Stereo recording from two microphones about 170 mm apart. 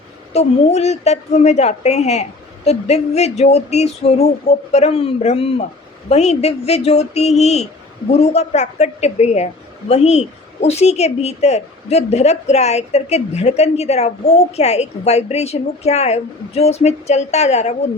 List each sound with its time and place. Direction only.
0.3 s a woman's voice: 40° left (ahead or behind)